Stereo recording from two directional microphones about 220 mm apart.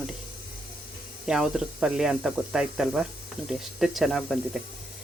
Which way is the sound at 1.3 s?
5° right (ahead or behind).